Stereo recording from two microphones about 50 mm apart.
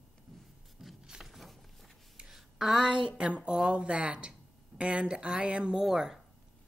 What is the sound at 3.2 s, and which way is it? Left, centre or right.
Speech, right.